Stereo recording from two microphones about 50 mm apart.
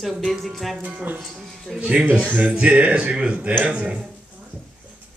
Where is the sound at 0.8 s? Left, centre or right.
Right.